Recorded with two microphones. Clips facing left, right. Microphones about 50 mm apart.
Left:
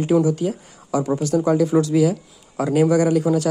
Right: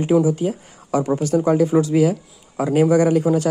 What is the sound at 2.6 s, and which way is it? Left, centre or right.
Speech, centre.